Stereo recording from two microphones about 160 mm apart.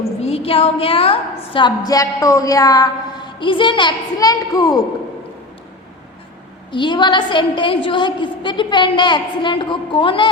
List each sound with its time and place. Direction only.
0.0 s a woman's voice: 40° left (ahead or behind); by 4.9 s 20° left (ahead or behind)
6.7 s a woman's voice: 30° left (ahead or behind)